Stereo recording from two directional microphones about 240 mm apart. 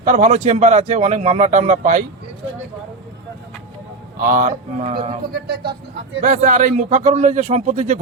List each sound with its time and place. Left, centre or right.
0.0 s speech: right
4.2 s speech: right
5.3 s speech: right